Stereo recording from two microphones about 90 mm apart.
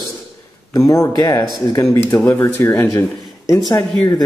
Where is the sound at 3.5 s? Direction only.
45° left (ahead or behind).